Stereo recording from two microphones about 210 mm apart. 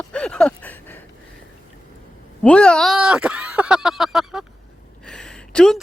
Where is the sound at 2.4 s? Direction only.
5° left (ahead or behind).